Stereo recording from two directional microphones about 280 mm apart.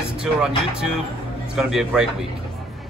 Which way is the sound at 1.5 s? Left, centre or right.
Centre.